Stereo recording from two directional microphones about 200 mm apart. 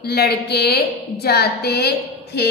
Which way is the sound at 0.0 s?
50° left (ahead or behind).